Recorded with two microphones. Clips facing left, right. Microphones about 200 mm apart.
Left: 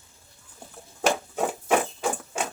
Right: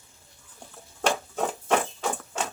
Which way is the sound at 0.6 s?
10° left (ahead or behind).